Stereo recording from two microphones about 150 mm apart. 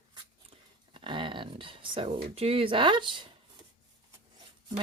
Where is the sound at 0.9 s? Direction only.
35° right (ahead or behind).